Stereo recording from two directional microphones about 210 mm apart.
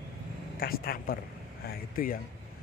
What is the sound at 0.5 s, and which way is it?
Speech, 45° left (ahead or behind).